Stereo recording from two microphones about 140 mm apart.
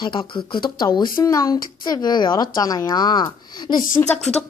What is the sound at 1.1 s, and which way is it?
Speech, 25° left (ahead or behind).